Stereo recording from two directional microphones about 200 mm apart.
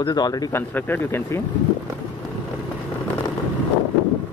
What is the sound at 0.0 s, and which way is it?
Speech, 20° left (ahead or behind).